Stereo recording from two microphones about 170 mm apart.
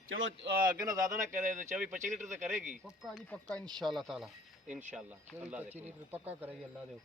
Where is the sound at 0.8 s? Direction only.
20° right (ahead or behind).